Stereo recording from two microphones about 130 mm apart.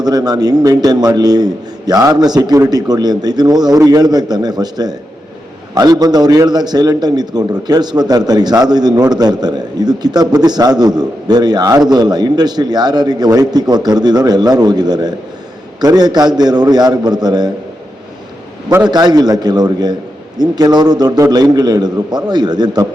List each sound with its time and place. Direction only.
0.0 s a man's voice: 30° right (ahead or behind)
18.9 s a man's voice: 30° right (ahead or behind)